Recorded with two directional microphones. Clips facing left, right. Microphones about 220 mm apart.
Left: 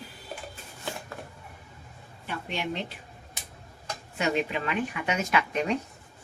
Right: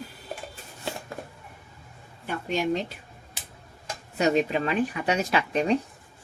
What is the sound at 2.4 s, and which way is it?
Speech, 40° right (ahead or behind).